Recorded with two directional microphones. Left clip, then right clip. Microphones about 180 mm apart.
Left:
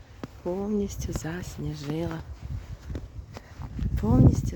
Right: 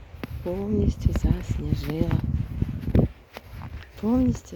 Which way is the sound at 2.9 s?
5° right (ahead or behind).